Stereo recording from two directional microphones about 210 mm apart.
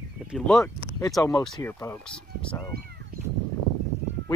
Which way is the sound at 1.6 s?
15° left (ahead or behind).